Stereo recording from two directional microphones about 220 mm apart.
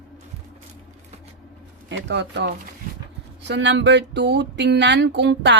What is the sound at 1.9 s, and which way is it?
Speech, 50° right (ahead or behind).